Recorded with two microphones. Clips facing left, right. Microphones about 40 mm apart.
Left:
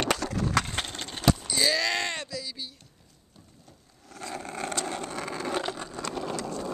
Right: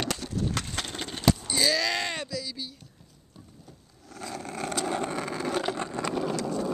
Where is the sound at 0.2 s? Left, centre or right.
Left.